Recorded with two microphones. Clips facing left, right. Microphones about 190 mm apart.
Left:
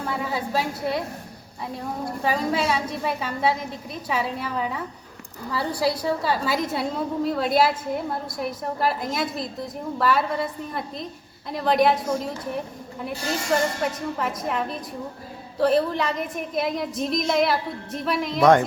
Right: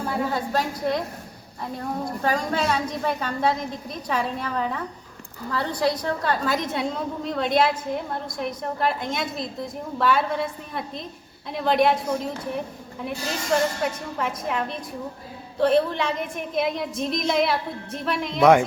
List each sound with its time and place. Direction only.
0.3 s a woman's voice: 5° left (ahead or behind)
2.2 s a woman's voice: 5° left (ahead or behind)